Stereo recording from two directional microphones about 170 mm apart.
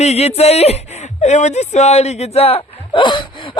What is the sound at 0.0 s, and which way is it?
Speech, 40° left (ahead or behind).